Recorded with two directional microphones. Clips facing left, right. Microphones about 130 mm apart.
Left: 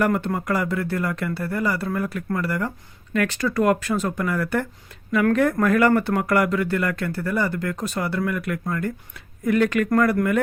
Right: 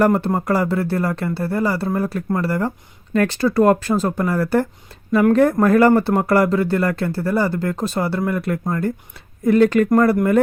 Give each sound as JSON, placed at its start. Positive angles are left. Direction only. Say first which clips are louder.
{"t": 0.0, "sound": "speech", "louder": "right 5 dB", "side_deg": -30}